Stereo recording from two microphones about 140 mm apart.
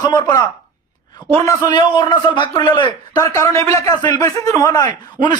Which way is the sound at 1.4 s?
30° left (ahead or behind).